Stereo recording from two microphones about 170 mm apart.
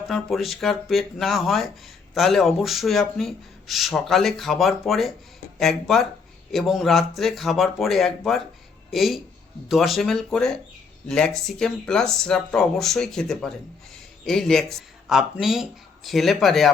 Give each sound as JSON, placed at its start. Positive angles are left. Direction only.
{"t": 0.2, "sound": "speech", "side_deg": 0}